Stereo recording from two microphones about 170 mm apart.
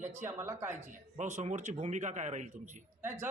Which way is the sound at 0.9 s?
45° right (ahead or behind).